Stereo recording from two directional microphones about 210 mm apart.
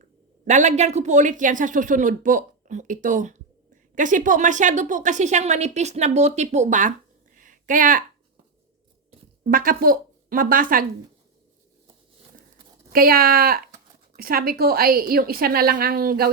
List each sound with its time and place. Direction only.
0.4 s a woman's voice: 35° right (ahead or behind)
7.3 s a sound: 40° right (ahead or behind)
9.4 s speech: 40° right (ahead or behind)
12.9 s a woman's voice: 45° right (ahead or behind)